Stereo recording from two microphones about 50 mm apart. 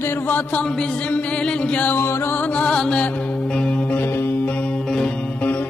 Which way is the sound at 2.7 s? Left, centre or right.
Centre.